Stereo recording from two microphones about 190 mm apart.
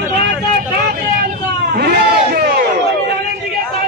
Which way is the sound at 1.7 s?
55° right (ahead or behind).